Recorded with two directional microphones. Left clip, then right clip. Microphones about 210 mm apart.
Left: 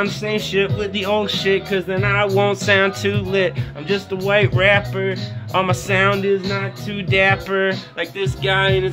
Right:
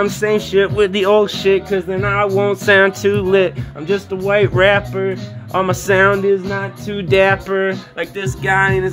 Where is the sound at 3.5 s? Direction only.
5° right (ahead or behind).